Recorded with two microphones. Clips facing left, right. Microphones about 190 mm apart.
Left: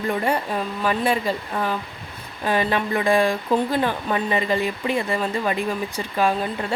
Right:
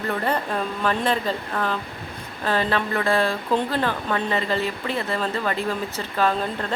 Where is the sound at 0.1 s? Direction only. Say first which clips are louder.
Left 1 dB; 10° left (ahead or behind).